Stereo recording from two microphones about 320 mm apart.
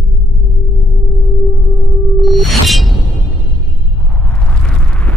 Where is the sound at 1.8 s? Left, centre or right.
Centre.